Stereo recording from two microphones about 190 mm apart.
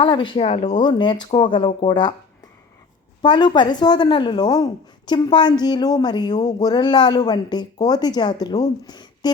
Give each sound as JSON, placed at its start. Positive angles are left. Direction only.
{"t": 0.0, "sound": "a woman's voice", "side_deg": 25}
{"t": 0.7, "sound": "a woman's voice", "side_deg": 25}
{"t": 3.2, "sound": "a woman's voice", "side_deg": 25}